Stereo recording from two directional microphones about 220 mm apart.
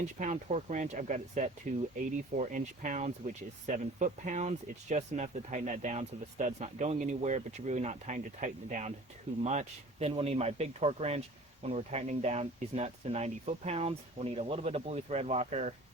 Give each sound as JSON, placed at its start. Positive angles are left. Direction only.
{"t": 0.2, "sound": "speech", "side_deg": -30}